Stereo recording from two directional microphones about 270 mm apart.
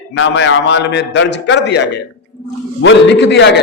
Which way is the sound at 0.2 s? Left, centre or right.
Left.